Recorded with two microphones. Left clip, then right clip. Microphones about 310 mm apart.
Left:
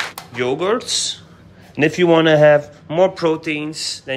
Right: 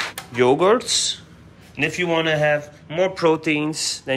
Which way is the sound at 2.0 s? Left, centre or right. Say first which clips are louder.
Left 9 dB; left.